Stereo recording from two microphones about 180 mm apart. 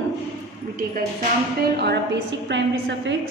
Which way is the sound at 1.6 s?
65° right (ahead or behind).